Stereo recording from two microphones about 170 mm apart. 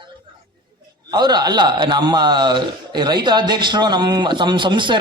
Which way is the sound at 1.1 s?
25° right (ahead or behind).